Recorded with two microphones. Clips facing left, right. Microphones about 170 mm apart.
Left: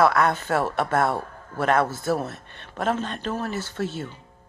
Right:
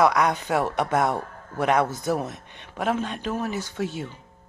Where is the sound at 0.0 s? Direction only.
15° right (ahead or behind).